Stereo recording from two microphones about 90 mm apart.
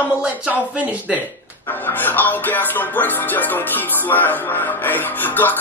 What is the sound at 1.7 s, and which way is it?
Music, 20° left (ahead or behind).